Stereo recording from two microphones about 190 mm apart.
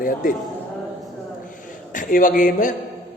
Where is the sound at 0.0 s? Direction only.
45° left (ahead or behind).